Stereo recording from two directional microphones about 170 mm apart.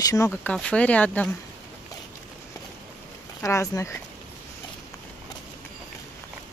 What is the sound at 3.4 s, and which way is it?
Speech, 15° left (ahead or behind).